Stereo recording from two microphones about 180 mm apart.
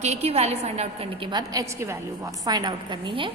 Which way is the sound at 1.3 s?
20° right (ahead or behind).